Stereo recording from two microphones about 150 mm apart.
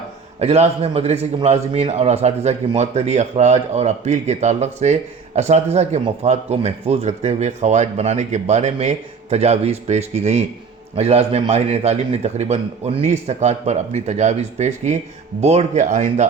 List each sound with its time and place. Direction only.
0.3 s a man's voice: 45° right (ahead or behind)